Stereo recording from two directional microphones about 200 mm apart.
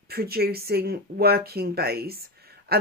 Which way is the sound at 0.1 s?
50° right (ahead or behind).